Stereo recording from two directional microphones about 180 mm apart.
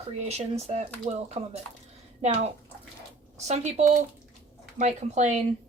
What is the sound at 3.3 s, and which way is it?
A woman's voice, 40° right (ahead or behind).